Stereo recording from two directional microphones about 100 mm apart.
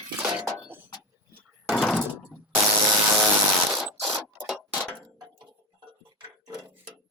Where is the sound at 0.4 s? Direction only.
25° right (ahead or behind).